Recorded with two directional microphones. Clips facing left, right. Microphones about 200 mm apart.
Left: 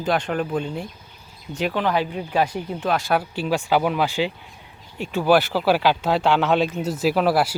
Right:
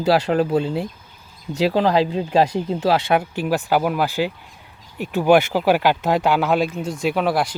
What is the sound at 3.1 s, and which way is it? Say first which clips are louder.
Speech: right 2 dB; 10° right (ahead or behind).